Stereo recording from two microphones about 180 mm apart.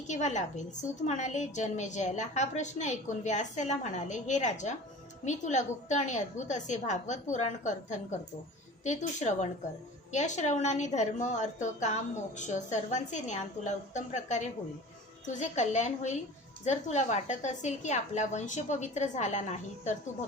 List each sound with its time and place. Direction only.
0.1 s a woman's voice: 40° left (ahead or behind)